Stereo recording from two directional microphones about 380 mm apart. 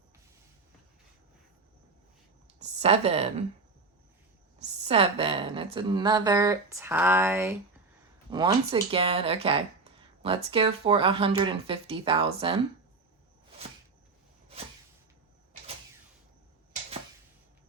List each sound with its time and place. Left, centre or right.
2.6 s a woman's voice: centre
4.6 s speech: centre